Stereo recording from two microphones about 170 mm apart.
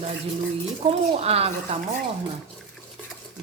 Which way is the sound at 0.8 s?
35° right (ahead or behind).